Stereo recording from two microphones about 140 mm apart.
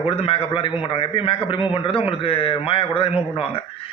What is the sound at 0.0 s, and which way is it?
A man's voice, 45° left (ahead or behind).